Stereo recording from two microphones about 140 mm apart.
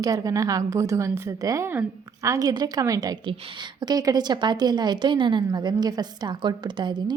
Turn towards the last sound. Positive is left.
turn(degrees=-35)  # may be behind; listen again after turning